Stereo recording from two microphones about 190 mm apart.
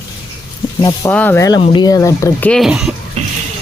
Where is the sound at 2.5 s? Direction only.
Centre (ahead or behind).